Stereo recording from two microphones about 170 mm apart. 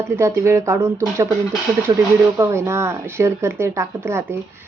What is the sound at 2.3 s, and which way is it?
Speech, 15° right (ahead or behind).